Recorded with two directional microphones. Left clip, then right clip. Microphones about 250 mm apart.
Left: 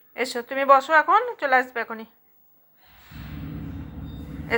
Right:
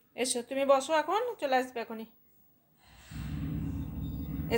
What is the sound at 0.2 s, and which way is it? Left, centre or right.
A woman's voice, centre.